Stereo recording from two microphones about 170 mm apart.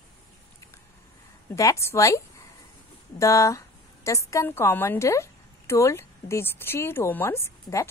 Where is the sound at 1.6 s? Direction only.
15° left (ahead or behind).